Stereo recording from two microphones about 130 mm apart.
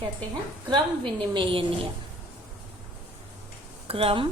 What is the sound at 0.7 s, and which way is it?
Speech, 40° right (ahead or behind).